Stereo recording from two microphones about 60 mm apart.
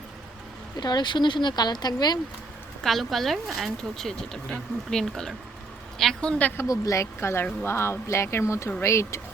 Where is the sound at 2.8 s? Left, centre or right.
Centre.